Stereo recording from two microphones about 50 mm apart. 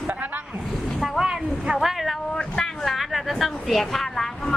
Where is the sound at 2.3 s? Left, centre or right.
Centre.